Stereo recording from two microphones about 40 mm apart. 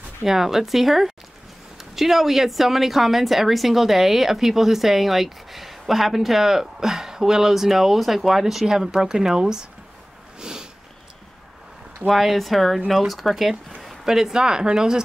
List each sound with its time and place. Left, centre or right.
0.2 s a woman's voice: centre
10.4 s a sound: centre
12.1 s a woman's voice: centre